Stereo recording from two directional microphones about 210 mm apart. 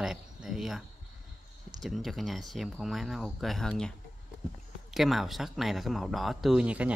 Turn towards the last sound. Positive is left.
turn(degrees=-5)  # may be behind; listen again after turning